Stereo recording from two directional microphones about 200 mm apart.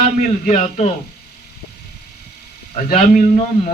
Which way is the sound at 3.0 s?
35° left (ahead or behind).